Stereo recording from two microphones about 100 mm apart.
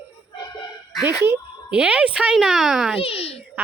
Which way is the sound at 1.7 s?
10° right (ahead or behind).